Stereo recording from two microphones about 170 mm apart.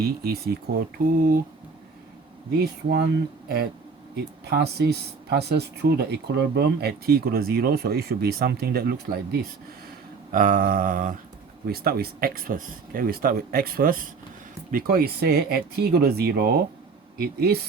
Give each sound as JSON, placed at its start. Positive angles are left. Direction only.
{"t": 0.0, "sound": "speech", "side_deg": -65}
{"t": 2.6, "sound": "speech", "side_deg": -75}
{"t": 4.1, "sound": "speech", "side_deg": -75}
{"t": 10.3, "sound": "mantra", "side_deg": -55}
{"t": 11.6, "sound": "speech", "side_deg": -65}